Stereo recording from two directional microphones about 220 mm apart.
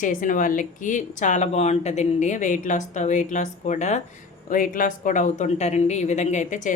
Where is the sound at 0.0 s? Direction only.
35° left (ahead or behind).